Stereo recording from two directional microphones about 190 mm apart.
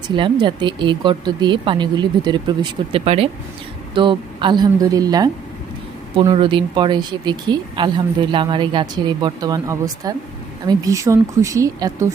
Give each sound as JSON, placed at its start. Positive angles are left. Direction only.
{"t": 0.2, "sound": "speech", "side_deg": -25}